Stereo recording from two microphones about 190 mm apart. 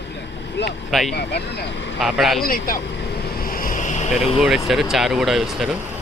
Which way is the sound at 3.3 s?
50° left (ahead or behind).